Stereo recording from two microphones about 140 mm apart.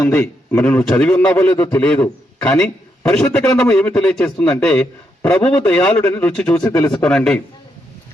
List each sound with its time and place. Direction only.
0.0 s a man's voice: 15° left (ahead or behind)
3.0 s a sound: 15° left (ahead or behind)
3.3 s speech: 20° left (ahead or behind)
3.6 s a man's voice: 5° left (ahead or behind)
6.6 s speech: 25° left (ahead or behind)
6.9 s a man's voice: 5° left (ahead or behind)